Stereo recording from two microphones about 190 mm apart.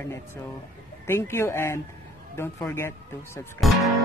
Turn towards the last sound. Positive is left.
turn(degrees=0)  # may be behind; listen again after turning